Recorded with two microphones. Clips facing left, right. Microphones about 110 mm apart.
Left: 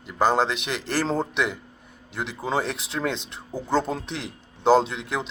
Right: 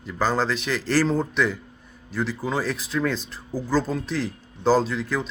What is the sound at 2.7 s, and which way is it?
Speech, 75° left (ahead or behind).